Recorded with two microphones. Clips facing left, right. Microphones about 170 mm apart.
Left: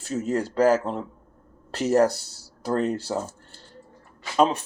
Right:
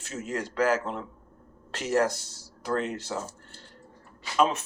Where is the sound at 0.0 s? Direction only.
35° left (ahead or behind).